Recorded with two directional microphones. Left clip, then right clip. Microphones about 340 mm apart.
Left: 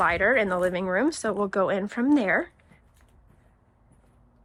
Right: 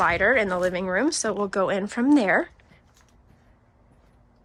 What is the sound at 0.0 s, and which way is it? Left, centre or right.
Speech, centre.